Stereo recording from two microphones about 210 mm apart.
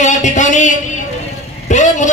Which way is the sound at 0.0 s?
35° left (ahead or behind).